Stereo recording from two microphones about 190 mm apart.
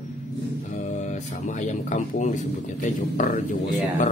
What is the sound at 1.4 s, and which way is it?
Speech, 40° left (ahead or behind).